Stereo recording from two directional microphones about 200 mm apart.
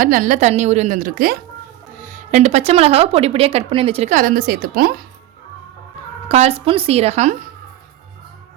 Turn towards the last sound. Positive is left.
turn(degrees=-35)  # may be behind; listen again after turning